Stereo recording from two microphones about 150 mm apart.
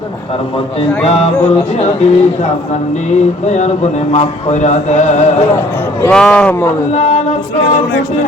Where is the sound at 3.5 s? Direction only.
50° left (ahead or behind).